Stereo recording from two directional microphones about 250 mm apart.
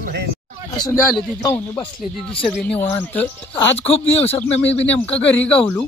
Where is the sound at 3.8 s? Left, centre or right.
Left.